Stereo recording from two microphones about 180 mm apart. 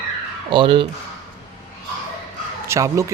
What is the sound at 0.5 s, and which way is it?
Speech, 25° right (ahead or behind).